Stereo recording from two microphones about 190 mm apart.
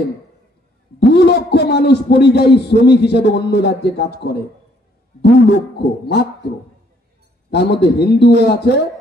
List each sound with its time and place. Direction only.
0.9 s a man's voice: 60° left (ahead or behind)
7.5 s a man's voice: 60° left (ahead or behind)